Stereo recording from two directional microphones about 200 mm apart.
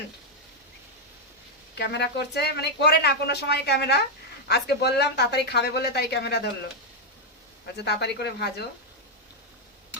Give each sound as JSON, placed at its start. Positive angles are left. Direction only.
{"t": 1.7, "sound": "speech", "side_deg": 55}
{"t": 7.8, "sound": "speech", "side_deg": 55}